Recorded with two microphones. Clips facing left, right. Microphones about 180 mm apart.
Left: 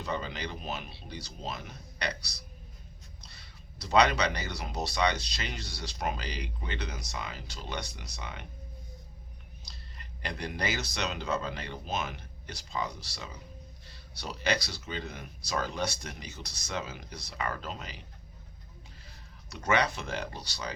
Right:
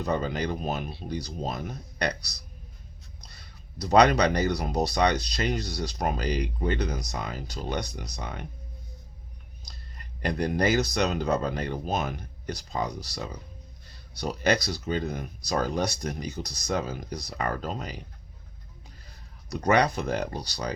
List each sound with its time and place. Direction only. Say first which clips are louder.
0.0 s speech: right 7 dB; 45° right (ahead or behind)
9.6 s speech: right 3 dB; 45° right (ahead or behind)
19.5 s speech: right 6 dB; 40° right (ahead or behind)